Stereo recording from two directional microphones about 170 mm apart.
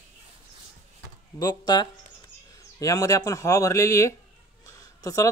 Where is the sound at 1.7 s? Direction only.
25° left (ahead or behind).